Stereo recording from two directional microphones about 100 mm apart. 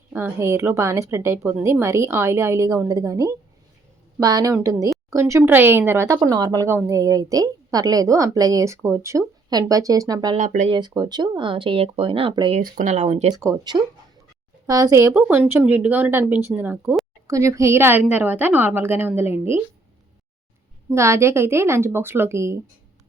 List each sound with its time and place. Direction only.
0.1 s speech: 25° right (ahead or behind)
2.6 s a woman's voice: 40° right (ahead or behind)
5.4 s speech: 20° right (ahead or behind)
6.2 s a woman's voice: 40° right (ahead or behind)
6.7 s a woman's voice: 30° right (ahead or behind)
9.5 s a woman's voice: 40° right (ahead or behind); by 12.3 s 65° right (ahead or behind)
13.5 s speech: 45° right (ahead or behind)
14.7 s speech: 35° right (ahead or behind); by 17.0 s 20° right (ahead or behind)
17.2 s speech: 30° right (ahead or behind)
20.9 s speech: 30° right (ahead or behind)